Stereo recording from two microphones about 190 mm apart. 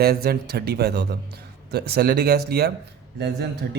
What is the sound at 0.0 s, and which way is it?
Speech, 55° right (ahead or behind).